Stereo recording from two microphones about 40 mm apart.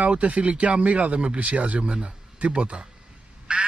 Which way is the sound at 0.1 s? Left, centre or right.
Right.